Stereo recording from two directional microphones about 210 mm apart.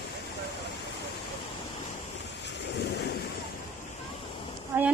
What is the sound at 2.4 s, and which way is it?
Waves, 55° left (ahead or behind).